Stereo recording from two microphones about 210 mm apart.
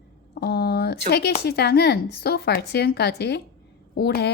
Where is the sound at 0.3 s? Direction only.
50° left (ahead or behind).